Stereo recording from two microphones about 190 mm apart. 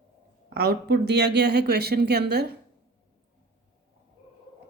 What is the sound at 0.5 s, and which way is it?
Speech, 55° right (ahead or behind).